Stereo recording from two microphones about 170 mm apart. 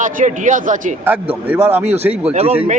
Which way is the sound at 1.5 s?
10° right (ahead or behind).